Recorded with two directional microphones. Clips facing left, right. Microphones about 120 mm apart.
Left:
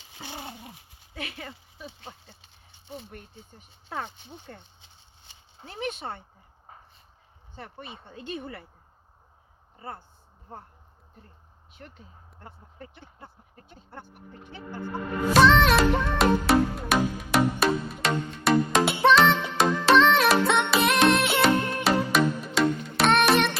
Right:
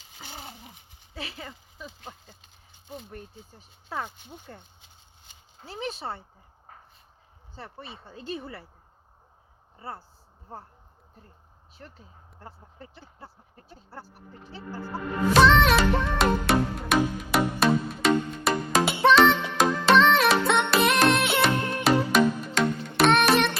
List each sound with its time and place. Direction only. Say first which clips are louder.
1.1 s speech: left 1 dB; 30° right (ahead or behind)
2.0 s speech: right 1 dB; centre (ahead or behind)
5.6 s speech: even; 30° right (ahead or behind)
7.5 s speech: even; 35° right (ahead or behind)
11.9 s speech: even; 35° right (ahead or behind)
14.9 s music: even; centre (ahead or behind)